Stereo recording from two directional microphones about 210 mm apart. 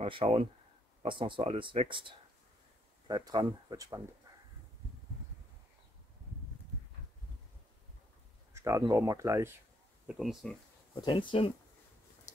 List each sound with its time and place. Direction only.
0.0 s speech: 30° right (ahead or behind)
8.5 s speech: 15° right (ahead or behind)
10.0 s speech: centre (ahead or behind)
11.0 s speech: 25° left (ahead or behind)